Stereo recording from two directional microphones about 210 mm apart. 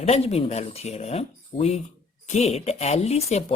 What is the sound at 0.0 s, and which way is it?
Speech, 30° left (ahead or behind).